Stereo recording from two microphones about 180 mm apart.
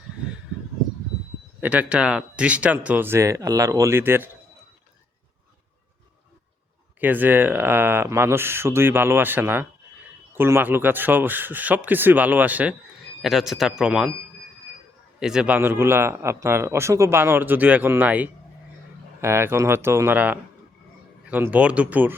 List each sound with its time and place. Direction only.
1.6 s a man's voice: 10° right (ahead or behind)
7.0 s a man's voice: 10° right (ahead or behind)
15.2 s a man's voice: 5° right (ahead or behind)